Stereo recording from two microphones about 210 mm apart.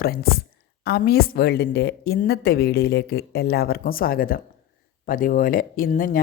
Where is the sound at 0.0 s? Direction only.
45° left (ahead or behind).